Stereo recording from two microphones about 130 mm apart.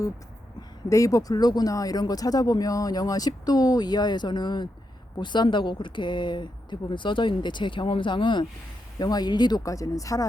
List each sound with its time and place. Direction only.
0.9 s a woman's voice: 25° left (ahead or behind)